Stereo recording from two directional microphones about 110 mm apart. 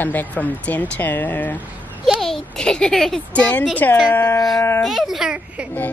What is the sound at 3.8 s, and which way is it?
Speech, 20° left (ahead or behind).